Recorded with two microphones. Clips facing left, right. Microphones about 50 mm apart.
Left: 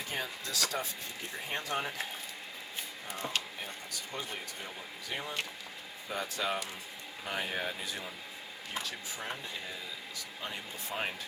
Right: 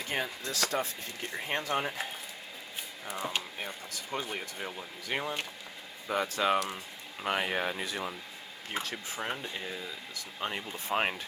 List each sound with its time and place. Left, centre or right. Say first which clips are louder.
0.1 s speech: right 4 dB; right
3.2 s speech: right 2 dB; centre
4.1 s speech: right 6 dB; right
5.1 s speech: right 4 dB; right
7.3 s speech: right 5 dB; right
8.7 s speech: right 4 dB; right
10.4 s speech: right 6 dB; right